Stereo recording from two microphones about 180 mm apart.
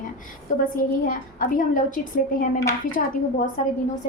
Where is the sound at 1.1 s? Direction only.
50° left (ahead or behind).